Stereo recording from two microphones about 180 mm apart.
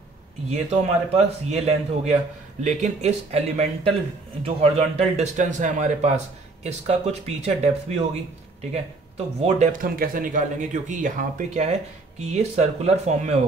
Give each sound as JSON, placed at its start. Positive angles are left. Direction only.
{"t": 1.1, "sound": "speech", "side_deg": -35}